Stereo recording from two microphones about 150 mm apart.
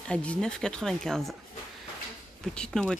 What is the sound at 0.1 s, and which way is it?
Speech, 5° left (ahead or behind).